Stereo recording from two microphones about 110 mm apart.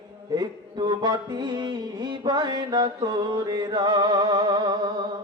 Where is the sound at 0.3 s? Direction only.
40° right (ahead or behind).